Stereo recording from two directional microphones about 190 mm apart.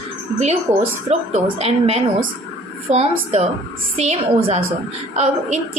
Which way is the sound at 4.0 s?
35° right (ahead or behind).